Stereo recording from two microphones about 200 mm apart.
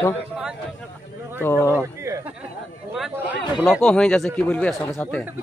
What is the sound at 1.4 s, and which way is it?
Speech, 10° left (ahead or behind).